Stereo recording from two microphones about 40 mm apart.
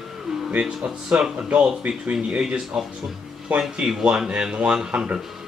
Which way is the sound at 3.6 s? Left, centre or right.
Centre.